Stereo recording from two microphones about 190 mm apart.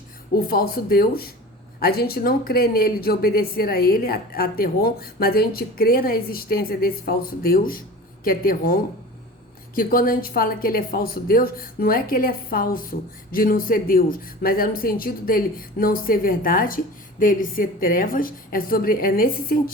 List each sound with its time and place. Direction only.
0.3 s a woman's voice: 50° left (ahead or behind)